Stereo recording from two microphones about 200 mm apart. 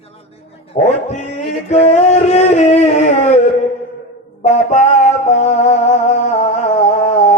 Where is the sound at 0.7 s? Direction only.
35° left (ahead or behind).